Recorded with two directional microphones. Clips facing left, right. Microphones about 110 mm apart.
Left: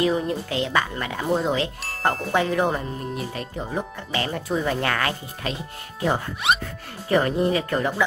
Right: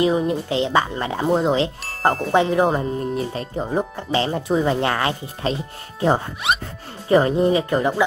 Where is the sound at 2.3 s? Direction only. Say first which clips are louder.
Right 5 dB; 20° right (ahead or behind).